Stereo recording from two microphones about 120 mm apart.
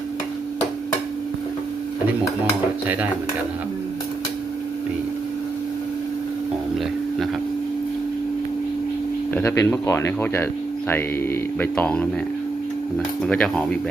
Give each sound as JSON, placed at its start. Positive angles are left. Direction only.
{"t": 9.3, "sound": "speech", "side_deg": 15}
{"t": 13.2, "sound": "speech", "side_deg": 5}